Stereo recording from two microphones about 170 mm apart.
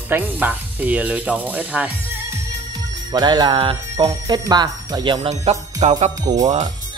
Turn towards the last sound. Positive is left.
turn(degrees=-25)  # may be behind; listen again after turning